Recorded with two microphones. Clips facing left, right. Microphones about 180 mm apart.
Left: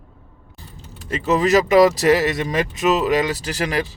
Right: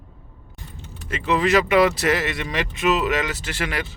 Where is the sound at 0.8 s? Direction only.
40° left (ahead or behind).